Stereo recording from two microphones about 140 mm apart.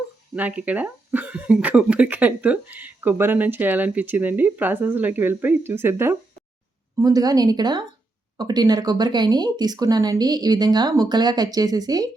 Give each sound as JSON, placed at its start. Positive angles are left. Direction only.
{"t": 0.3, "sound": "speech", "side_deg": -10}
{"t": 7.0, "sound": "speech", "side_deg": -25}